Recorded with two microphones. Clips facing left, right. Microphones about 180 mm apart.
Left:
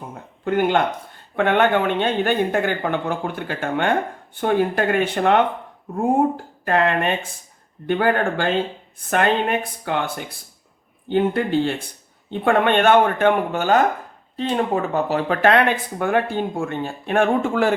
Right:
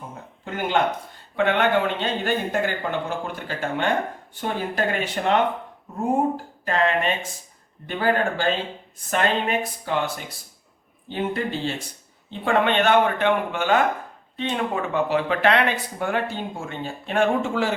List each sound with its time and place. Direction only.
0.4 s speech: 55° left (ahead or behind)
6.7 s speech: 55° left (ahead or behind)